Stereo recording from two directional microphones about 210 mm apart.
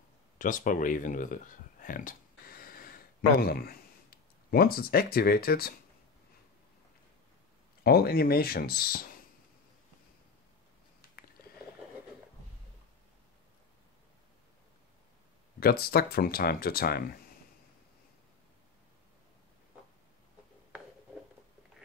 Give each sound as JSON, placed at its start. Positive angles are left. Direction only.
{"t": 0.4, "sound": "speech", "side_deg": 40}
{"t": 7.8, "sound": "speech", "side_deg": 45}
{"t": 15.6, "sound": "speech", "side_deg": 45}